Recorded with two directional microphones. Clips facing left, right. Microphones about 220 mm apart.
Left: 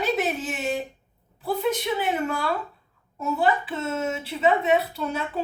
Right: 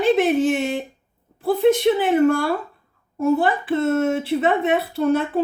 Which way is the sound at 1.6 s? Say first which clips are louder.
Right 10 dB; 50° right (ahead or behind).